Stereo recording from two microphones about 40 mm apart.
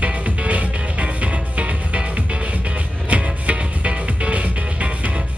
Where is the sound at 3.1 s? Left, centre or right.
Right.